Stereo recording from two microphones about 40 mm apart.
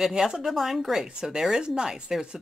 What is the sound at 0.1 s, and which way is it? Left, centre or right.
Speech, centre.